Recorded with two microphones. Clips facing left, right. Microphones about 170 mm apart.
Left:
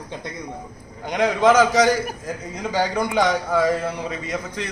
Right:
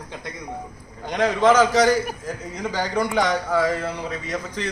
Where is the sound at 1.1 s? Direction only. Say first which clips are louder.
Left 1 dB; 15° left (ahead or behind).